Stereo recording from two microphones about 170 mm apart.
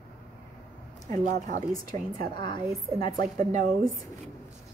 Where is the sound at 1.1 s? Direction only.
45° right (ahead or behind).